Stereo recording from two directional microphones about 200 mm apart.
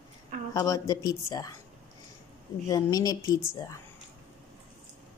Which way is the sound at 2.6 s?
20° left (ahead or behind).